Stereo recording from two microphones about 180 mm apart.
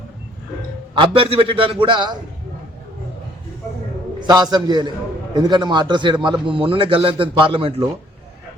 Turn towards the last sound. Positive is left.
turn(degrees=-30)  # may be behind; listen again after turning